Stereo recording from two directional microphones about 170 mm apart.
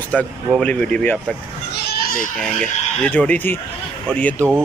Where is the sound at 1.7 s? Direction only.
80° left; by 2.3 s 55° left (ahead or behind).